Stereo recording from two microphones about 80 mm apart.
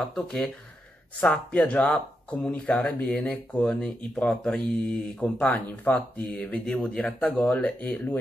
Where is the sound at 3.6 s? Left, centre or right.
Centre.